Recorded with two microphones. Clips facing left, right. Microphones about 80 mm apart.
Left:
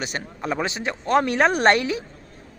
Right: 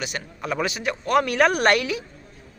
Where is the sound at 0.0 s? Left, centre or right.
Left.